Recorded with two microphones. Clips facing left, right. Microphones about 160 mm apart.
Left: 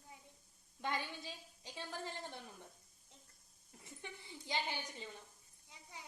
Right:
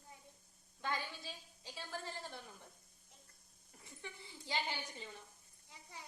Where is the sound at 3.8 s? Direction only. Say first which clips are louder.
Even; 20° left (ahead or behind).